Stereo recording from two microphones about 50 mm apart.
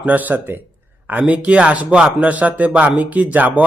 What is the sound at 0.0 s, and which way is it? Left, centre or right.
Speech, right.